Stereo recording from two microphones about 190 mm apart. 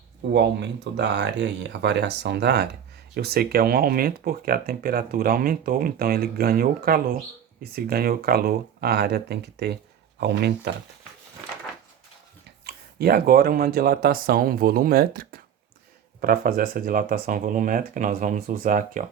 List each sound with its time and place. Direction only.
0.3 s speech: 60° right (ahead or behind)
12.6 s speech: 55° right (ahead or behind)